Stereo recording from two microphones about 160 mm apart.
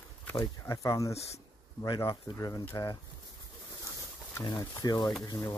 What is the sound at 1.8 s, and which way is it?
Speech, 30° left (ahead or behind).